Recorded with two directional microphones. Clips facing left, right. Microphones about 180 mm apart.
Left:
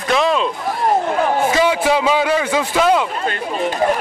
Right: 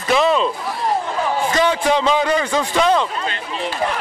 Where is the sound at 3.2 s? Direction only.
45° left (ahead or behind).